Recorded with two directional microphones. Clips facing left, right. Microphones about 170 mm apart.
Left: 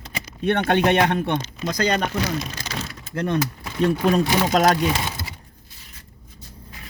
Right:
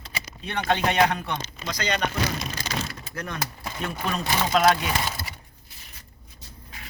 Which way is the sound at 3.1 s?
25° left (ahead or behind).